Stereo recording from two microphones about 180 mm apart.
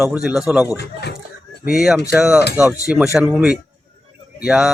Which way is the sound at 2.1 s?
5° right (ahead or behind).